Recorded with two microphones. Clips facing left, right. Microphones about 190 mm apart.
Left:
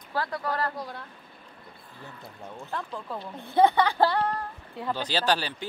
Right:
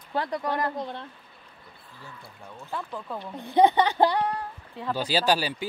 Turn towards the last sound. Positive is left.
turn(degrees=-10)  # may be behind; listen again after turning